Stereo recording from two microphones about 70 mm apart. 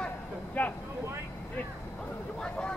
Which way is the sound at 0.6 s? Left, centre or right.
Left.